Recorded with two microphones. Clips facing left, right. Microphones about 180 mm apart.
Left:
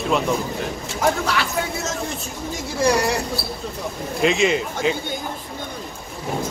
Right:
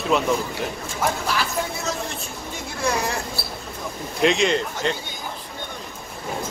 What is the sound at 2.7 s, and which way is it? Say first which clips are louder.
Speech: left 6 dB; 90° left.